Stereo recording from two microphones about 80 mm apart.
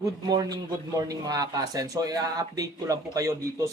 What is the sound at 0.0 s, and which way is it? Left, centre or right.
A man's voice, right.